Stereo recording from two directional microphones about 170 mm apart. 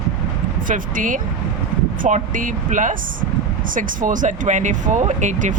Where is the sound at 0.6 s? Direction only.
50° right (ahead or behind).